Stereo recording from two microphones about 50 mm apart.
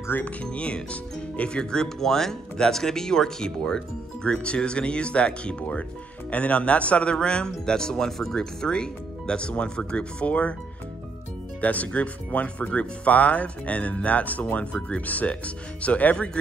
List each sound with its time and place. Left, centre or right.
0.1 s speech: left
1.6 s speech: centre
11.6 s speech: left